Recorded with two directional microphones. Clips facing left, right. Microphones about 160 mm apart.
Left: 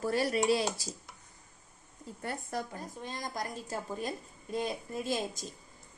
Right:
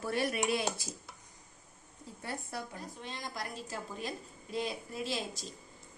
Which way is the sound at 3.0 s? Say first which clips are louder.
Left 4 dB; 45° left (ahead or behind).